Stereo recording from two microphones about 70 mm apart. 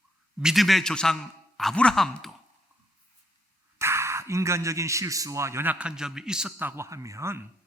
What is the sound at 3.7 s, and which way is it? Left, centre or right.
Speech, right.